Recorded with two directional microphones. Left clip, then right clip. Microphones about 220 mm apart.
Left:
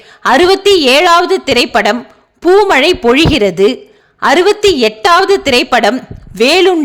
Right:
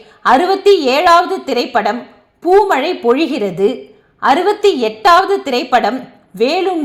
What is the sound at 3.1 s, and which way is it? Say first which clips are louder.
A woman's voice: left 5 dB; 55° left (ahead or behind).